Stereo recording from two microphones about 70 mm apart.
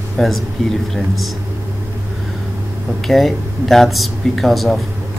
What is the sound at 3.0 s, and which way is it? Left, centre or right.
Speech, centre.